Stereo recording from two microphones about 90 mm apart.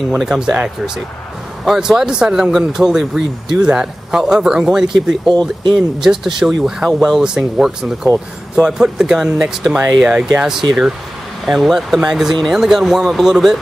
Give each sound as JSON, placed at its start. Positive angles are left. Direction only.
{"t": 0.1, "sound": "speech", "side_deg": -5}